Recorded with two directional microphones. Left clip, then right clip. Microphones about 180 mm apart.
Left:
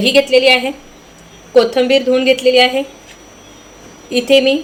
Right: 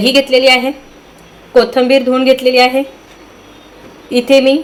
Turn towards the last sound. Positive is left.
turn(degrees=-5)  # may be behind; listen again after turning